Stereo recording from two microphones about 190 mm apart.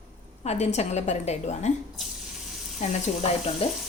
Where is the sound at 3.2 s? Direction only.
35° left (ahead or behind).